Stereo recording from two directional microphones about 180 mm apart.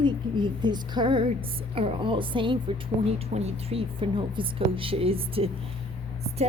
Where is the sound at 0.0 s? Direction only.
25° right (ahead or behind).